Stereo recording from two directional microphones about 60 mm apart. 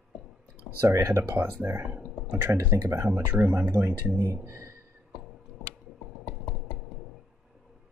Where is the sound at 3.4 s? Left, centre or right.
Right.